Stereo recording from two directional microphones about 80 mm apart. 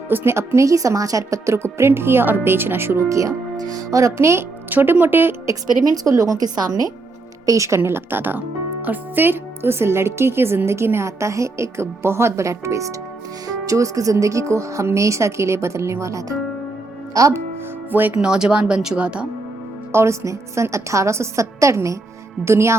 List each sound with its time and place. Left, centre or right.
0.1 s speech: right
4.7 s speech: right
5.5 s a woman's voice: right
7.8 s a woman's voice: right
17.9 s speech: right
18.2 s speech: centre
19.9 s speech: right